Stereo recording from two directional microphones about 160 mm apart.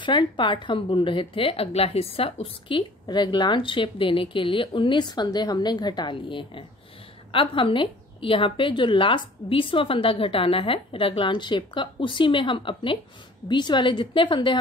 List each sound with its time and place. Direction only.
0.0 s a woman's voice: 30° left (ahead or behind)